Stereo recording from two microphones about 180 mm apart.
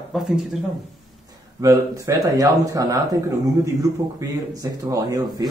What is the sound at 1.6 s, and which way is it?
Speech, 20° right (ahead or behind).